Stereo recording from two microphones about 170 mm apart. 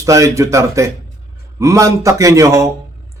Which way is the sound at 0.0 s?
20° right (ahead or behind).